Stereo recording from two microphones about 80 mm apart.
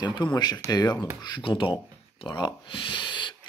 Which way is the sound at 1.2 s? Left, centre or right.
Left.